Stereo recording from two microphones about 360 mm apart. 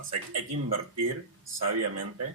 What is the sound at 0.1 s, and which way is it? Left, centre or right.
Speech, right.